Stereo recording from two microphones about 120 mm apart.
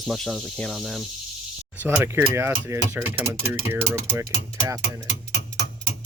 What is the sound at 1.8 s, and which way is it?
Speech, 15° right (ahead or behind).